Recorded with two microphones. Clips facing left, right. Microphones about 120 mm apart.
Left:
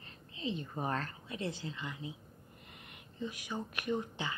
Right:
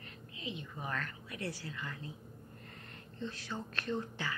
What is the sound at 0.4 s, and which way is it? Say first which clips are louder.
A woman's voice: left 6 dB; 35° left (ahead or behind).